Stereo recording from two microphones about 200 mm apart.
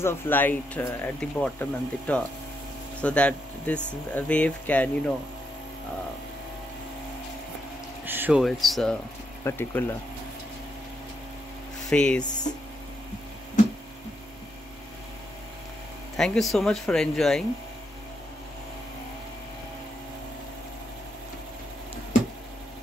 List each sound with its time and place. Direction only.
0.0 s speech: 10° left (ahead or behind)
8.0 s speech: 10° right (ahead or behind)
9.4 s speech: 10° left (ahead or behind)
11.9 s speech: 5° left (ahead or behind)
16.2 s speech: centre (ahead or behind)